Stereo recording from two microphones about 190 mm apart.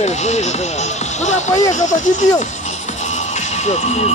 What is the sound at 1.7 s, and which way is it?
Speech, 40° left (ahead or behind).